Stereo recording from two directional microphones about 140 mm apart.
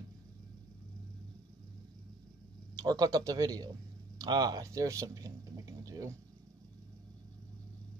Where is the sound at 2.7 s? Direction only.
30° right (ahead or behind).